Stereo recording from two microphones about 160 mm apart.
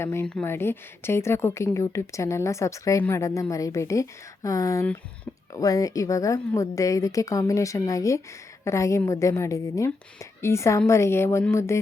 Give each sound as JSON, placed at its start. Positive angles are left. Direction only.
{"t": 0.0, "sound": "a woman's voice", "side_deg": 15}